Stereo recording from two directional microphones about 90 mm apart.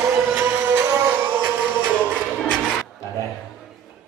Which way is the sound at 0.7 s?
20° right (ahead or behind).